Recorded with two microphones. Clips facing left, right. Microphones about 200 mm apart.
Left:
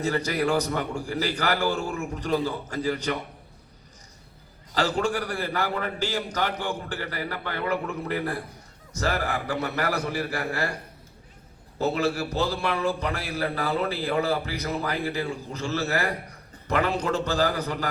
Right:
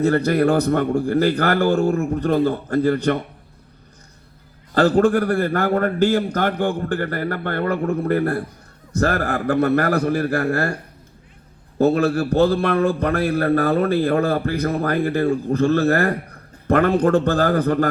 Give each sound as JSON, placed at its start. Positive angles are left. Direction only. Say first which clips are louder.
{"t": 0.0, "sound": "a man's voice", "louder": "right 9 dB", "side_deg": -55}
{"t": 4.7, "sound": "a man's voice", "louder": "right 10 dB", "side_deg": -55}
{"t": 11.8, "sound": "a man's voice", "louder": "right 8 dB", "side_deg": -55}